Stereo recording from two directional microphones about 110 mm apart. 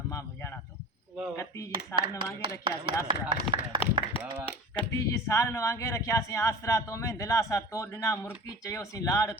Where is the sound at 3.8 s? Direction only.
55° left (ahead or behind).